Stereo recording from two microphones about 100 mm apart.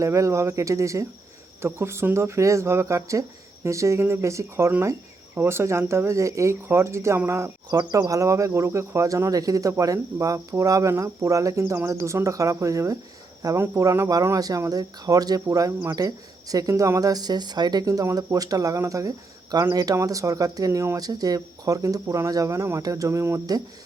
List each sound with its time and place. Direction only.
0.0 s speech: 30° right (ahead or behind)
7.7 s speech: 40° right (ahead or behind)